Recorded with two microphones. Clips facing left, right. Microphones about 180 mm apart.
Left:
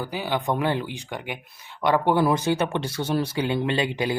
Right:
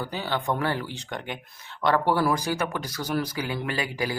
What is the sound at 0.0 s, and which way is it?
Speech, 10° left (ahead or behind).